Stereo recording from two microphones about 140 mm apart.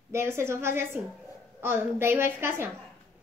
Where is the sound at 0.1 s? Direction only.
20° right (ahead or behind).